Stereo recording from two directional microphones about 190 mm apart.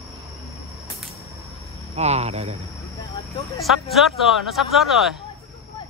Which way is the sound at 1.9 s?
35° right (ahead or behind).